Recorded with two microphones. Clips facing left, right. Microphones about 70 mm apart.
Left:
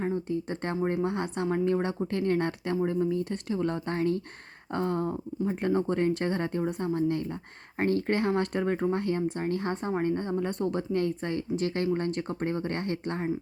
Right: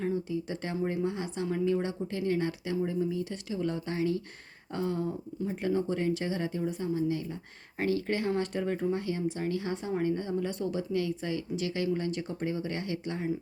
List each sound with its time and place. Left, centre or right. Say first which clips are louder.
0.0 s speech: left 2 dB; left